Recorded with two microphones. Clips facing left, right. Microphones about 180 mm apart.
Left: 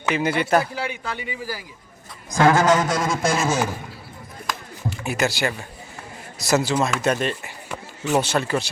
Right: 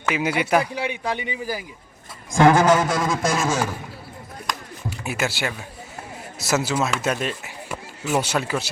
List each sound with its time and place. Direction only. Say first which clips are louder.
0.1 s speech: left 1 dB; 10° right (ahead or behind)
0.8 s speech: right 3 dB; 20° right (ahead or behind)
2.9 s speech: even; centre (ahead or behind)
4.4 s a sound: left 2 dB; centre (ahead or behind)
6.4 s speech: left 2 dB; 5° right (ahead or behind)